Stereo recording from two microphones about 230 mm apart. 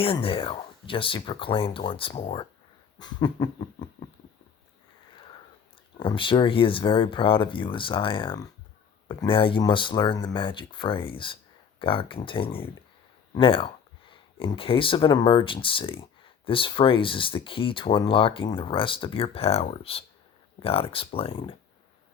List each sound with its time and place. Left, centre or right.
0.0 s speech: left
3.0 s dog: centre
6.0 s speech: left